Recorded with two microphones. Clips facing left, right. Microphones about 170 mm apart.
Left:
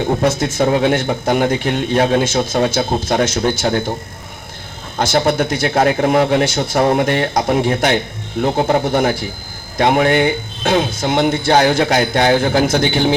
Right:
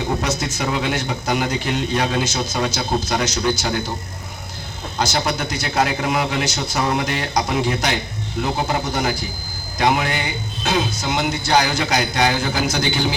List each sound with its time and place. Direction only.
0.2 s a man's voice: 50° left (ahead or behind)
4.9 s a man's voice: 50° left (ahead or behind)